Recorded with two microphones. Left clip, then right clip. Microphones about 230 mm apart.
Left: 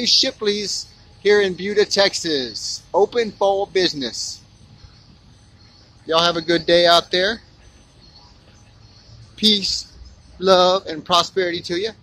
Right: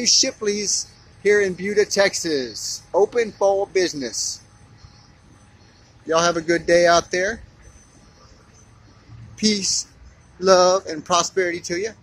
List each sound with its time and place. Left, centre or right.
0.0 s speech: centre
6.0 s speech: centre
9.4 s speech: centre